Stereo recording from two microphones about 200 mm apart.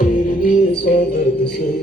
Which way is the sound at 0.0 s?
45° left (ahead or behind).